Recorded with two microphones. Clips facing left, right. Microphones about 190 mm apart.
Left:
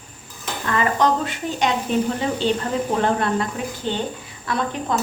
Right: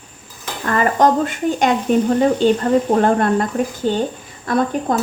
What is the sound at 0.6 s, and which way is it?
A woman's voice, 50° right (ahead or behind).